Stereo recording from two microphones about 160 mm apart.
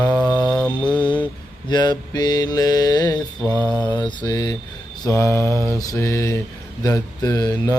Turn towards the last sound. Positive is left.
turn(degrees=20)  # may be behind; listen again after turning